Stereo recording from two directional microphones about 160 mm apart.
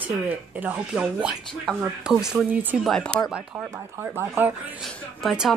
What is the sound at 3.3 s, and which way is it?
Speech, 10° right (ahead or behind).